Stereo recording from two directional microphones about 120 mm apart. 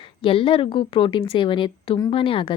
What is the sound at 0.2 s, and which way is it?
A woman's voice, 50° left (ahead or behind).